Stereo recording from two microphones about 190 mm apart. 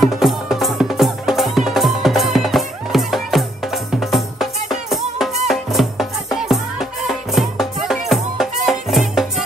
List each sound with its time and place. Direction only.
0.0 s music: centre (ahead or behind)